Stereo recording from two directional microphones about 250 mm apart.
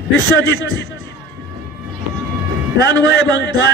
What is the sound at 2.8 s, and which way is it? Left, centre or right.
Speech, left.